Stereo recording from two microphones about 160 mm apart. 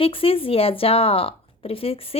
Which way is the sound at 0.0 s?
35° left (ahead or behind).